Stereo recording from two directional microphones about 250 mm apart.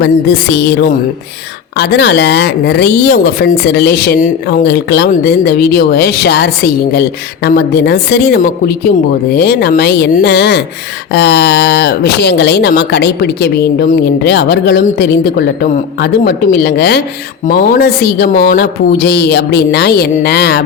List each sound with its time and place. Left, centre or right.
0.0 s music: left
1.8 s speech: left